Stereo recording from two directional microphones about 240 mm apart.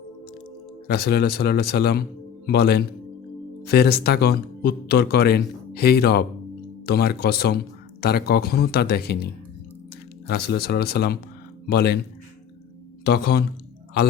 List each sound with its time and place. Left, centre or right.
0.9 s speech: left
13.1 s speech: left